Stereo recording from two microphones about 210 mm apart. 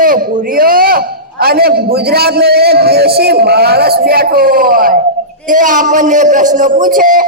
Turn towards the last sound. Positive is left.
turn(degrees=-40)  # may be behind; listen again after turning